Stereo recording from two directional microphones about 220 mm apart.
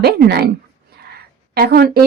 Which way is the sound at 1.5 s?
45° right (ahead or behind).